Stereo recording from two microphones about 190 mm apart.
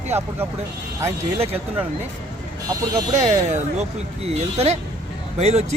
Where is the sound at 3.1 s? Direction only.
40° right (ahead or behind).